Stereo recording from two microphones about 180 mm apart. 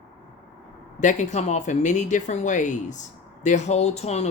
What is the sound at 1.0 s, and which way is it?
Speech, 40° left (ahead or behind).